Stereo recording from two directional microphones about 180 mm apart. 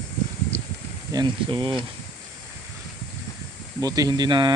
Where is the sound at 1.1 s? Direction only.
25° right (ahead or behind).